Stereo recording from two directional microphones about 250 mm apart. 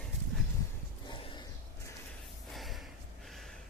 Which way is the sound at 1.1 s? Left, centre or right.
Centre.